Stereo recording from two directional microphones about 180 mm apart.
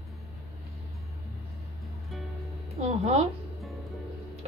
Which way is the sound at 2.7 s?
35° right (ahead or behind).